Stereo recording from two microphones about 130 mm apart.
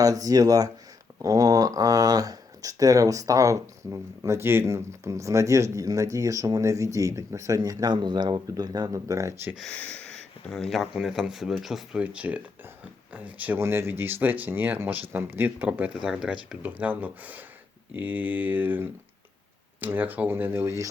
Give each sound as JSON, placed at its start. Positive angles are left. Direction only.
{"t": 0.0, "sound": "speech", "side_deg": -25}
{"t": 9.6, "sound": "speech", "side_deg": 10}